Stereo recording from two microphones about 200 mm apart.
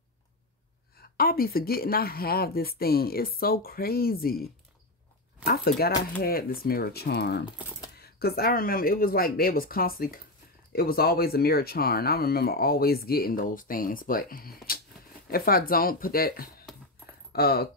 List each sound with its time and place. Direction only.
1.1 s speech: 50° left (ahead or behind)
5.4 s speech: 50° left (ahead or behind)